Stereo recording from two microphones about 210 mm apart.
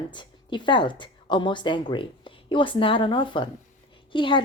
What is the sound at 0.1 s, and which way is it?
A woman's voice, 20° left (ahead or behind).